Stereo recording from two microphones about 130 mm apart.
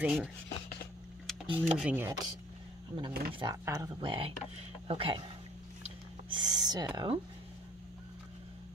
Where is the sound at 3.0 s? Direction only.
40° right (ahead or behind).